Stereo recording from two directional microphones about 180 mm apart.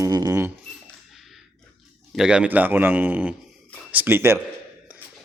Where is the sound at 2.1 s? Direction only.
5° right (ahead or behind).